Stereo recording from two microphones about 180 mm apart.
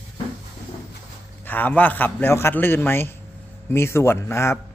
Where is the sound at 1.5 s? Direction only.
10° left (ahead or behind).